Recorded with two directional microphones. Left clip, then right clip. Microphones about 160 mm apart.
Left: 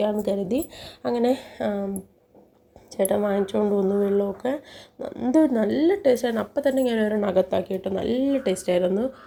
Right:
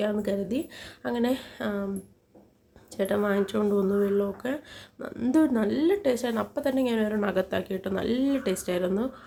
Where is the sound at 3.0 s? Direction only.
5° left (ahead or behind).